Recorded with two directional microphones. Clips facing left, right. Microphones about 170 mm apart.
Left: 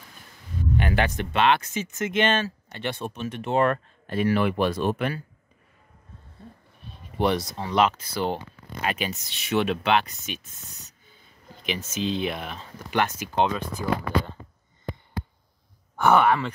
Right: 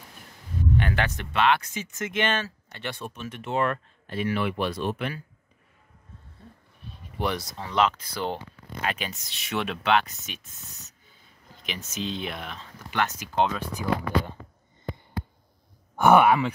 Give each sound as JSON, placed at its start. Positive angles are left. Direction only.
{"t": 0.7, "sound": "speech", "side_deg": 15}
{"t": 7.2, "sound": "speech", "side_deg": 25}
{"t": 11.6, "sound": "speech", "side_deg": 0}
{"t": 13.3, "sound": "speech", "side_deg": 0}
{"t": 16.0, "sound": "speech", "side_deg": -10}